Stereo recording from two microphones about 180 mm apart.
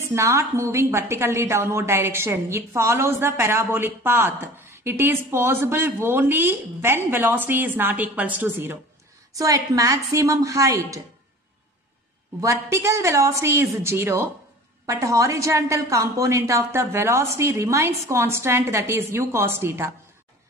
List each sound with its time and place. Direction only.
0.1 s a woman's voice: 15° right (ahead or behind)
12.4 s a woman's voice: 15° right (ahead or behind)